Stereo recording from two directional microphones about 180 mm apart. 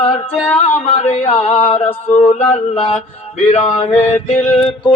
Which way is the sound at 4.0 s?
10° left (ahead or behind).